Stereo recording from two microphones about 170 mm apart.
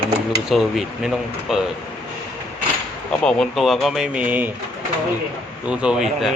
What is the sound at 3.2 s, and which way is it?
Speech, centre (ahead or behind).